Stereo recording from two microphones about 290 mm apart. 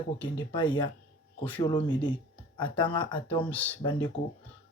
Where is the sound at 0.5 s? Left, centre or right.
Centre.